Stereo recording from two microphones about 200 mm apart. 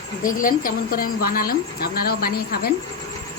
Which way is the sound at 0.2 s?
40° left (ahead or behind).